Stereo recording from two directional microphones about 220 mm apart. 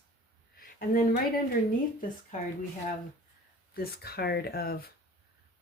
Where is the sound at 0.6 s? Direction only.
40° left (ahead or behind).